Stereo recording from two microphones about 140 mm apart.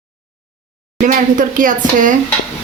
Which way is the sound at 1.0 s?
70° right (ahead or behind).